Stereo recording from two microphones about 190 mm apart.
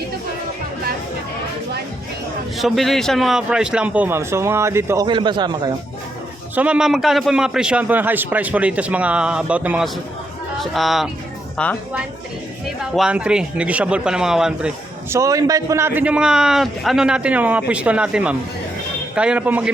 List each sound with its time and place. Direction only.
2.6 s a man's voice: centre (ahead or behind)
5.0 s a man's voice: 25° right (ahead or behind)
6.6 s a man's voice: 5° right (ahead or behind)
15.1 s a man's voice: 15° right (ahead or behind)